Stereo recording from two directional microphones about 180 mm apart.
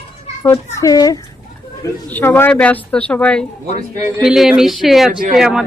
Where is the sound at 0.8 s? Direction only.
20° left (ahead or behind).